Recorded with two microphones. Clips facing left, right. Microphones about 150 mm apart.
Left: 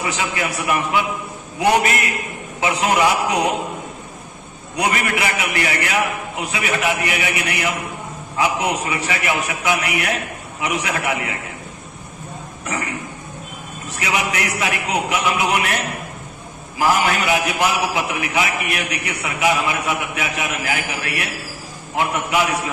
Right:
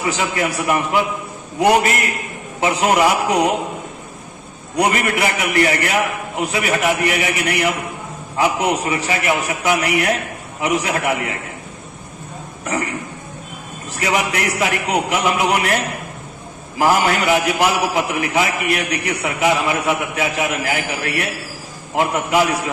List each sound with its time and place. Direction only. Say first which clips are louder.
0.4 s a man's voice: right 2 dB; 35° right (ahead or behind)
4.7 s a man's voice: right 3 dB; 35° right (ahead or behind)
12.6 s a man's voice: right 3 dB; 35° right (ahead or behind)